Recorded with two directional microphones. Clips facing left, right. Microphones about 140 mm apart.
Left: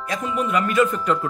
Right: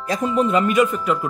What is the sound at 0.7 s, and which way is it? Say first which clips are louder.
Speech: right 1 dB; 10° right (ahead or behind).